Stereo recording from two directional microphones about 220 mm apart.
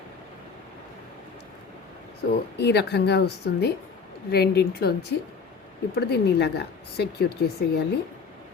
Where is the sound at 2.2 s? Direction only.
55° left (ahead or behind).